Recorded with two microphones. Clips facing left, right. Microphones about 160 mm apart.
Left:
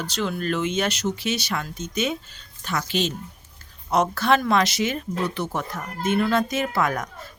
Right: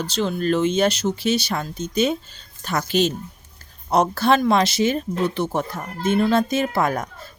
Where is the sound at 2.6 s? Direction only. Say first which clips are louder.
Right 5 dB; 45° right (ahead or behind).